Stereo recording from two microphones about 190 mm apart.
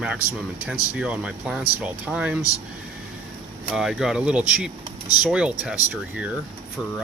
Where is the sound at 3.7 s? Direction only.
Centre (ahead or behind).